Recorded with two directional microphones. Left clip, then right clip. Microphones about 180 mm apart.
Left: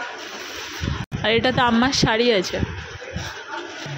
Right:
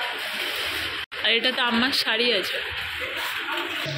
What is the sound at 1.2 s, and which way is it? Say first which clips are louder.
Speech: left 4 dB; 40° left (ahead or behind).